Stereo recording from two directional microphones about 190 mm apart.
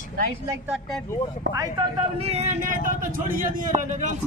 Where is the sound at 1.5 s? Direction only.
70° right (ahead or behind).